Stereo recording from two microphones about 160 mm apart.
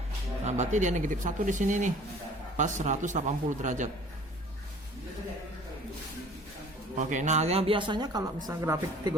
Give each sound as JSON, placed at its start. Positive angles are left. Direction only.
{"t": 0.4, "sound": "speech", "side_deg": -45}
{"t": 6.9, "sound": "speech", "side_deg": -50}